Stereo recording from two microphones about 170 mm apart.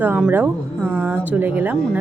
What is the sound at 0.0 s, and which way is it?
Speech, 10° right (ahead or behind).